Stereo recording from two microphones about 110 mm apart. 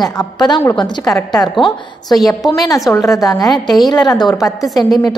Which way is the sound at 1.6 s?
50° left (ahead or behind).